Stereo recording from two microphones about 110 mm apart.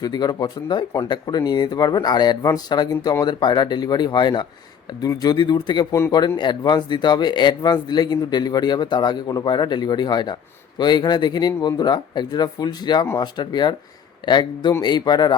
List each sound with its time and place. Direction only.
0.0 s speech: 40° left (ahead or behind)